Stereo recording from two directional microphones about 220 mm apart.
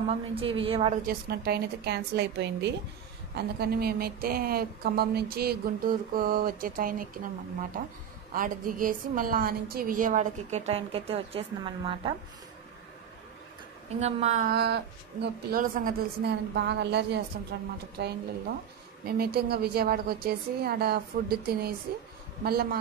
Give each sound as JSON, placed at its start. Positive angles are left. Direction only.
{"t": 0.1, "sound": "a woman's voice", "side_deg": -25}
{"t": 1.0, "sound": "a woman's voice", "side_deg": -45}
{"t": 8.3, "sound": "a woman's voice", "side_deg": -40}
{"t": 13.8, "sound": "a woman's voice", "side_deg": -30}
{"t": 14.5, "sound": "a woman's voice", "side_deg": -50}